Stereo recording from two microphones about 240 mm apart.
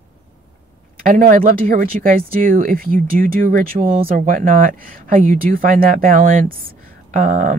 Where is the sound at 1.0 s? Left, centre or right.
Right.